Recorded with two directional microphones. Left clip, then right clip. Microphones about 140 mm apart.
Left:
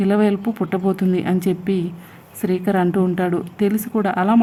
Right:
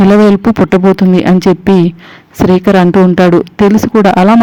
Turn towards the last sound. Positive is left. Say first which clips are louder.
# right 13 dB
turn(degrees=-45)  # may be behind; listen again after turning